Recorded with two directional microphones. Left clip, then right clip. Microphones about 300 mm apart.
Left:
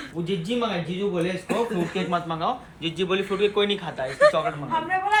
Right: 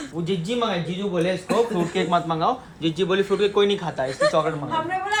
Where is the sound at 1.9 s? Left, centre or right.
Right.